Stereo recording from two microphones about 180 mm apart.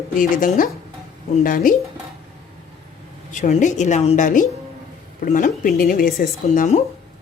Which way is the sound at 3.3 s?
45° left (ahead or behind).